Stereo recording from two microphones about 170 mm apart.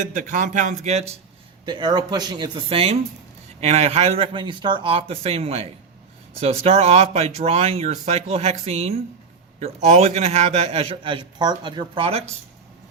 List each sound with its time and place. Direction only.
0.1 s speech: 50° right (ahead or behind)
1.6 s a man's voice: 25° right (ahead or behind)